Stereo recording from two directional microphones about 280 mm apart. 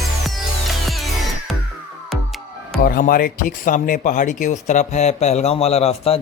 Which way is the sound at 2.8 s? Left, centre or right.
Left.